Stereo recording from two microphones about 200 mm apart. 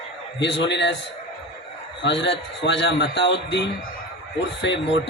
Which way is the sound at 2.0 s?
60° left (ahead or behind).